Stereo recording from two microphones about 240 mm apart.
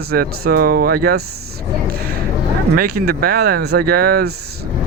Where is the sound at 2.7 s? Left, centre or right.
Right.